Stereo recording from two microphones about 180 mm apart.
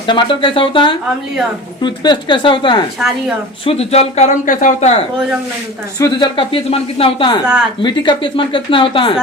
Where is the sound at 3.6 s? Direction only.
35° left (ahead or behind).